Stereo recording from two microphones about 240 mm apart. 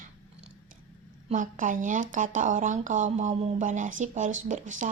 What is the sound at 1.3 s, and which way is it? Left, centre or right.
Speech, right.